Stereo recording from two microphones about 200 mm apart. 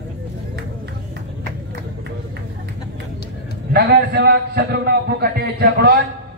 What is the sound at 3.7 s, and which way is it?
A man's voice, 55° right (ahead or behind).